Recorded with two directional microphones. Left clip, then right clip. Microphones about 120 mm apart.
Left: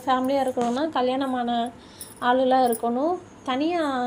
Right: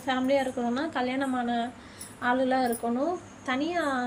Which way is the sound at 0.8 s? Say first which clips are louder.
Left 6 dB; 40° left (ahead or behind).